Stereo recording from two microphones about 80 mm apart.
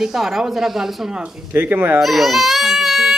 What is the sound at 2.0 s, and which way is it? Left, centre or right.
Speech, centre.